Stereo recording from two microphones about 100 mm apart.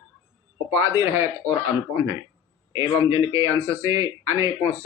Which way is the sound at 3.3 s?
30° right (ahead or behind).